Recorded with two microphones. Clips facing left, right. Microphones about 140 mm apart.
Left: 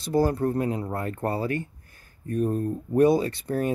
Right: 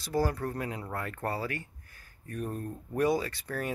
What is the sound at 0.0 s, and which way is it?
Speech, 25° left (ahead or behind).